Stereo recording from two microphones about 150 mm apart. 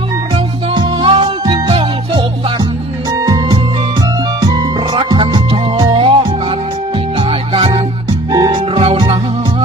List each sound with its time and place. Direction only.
0.7 s music: 35° right (ahead or behind)
3.2 s music: 25° right (ahead or behind)
4.9 s music: 35° right (ahead or behind)